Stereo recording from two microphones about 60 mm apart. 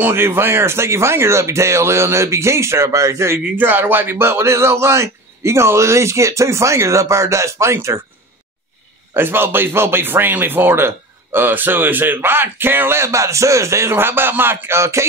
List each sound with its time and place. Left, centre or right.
0.0 s a man's voice: right
3.5 s a man's voice: right
9.1 s speech: right
14.8 s a man's voice: right